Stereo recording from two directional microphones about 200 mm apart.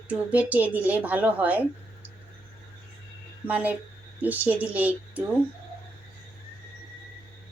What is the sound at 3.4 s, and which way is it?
Speech, 5° right (ahead or behind).